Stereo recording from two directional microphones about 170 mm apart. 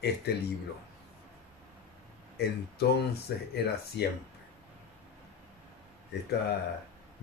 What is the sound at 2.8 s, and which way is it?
Speech, 70° left (ahead or behind).